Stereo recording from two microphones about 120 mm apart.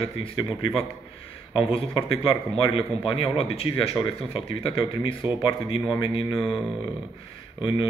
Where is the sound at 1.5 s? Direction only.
45° left (ahead or behind).